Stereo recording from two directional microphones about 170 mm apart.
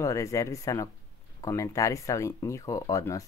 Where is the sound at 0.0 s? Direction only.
20° left (ahead or behind).